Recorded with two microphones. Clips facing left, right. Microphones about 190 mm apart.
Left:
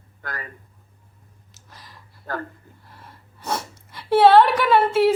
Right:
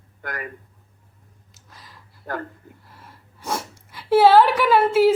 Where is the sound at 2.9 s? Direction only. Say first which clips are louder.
Left 1 dB; 5° right (ahead or behind).